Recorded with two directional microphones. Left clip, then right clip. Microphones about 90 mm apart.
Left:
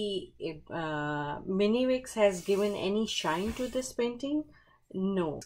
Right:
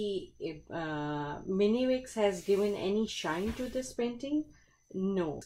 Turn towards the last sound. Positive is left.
turn(degrees=20)  # may be behind; listen again after turning